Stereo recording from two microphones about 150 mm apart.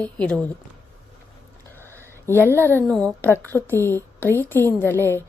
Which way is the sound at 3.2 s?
15° left (ahead or behind).